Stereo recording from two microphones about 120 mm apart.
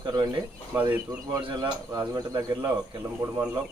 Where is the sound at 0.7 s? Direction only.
15° right (ahead or behind).